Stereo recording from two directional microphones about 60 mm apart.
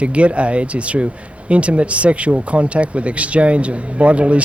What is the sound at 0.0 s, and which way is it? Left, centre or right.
Speech, right.